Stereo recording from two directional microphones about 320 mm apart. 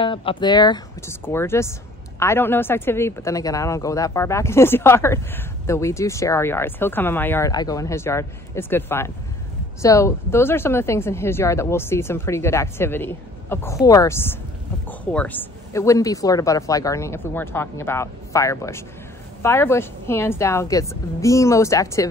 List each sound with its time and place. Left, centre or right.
0.0 s speech: centre